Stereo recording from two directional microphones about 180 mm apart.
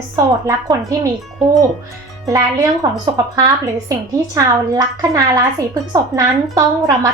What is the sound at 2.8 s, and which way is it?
Speech, 20° right (ahead or behind).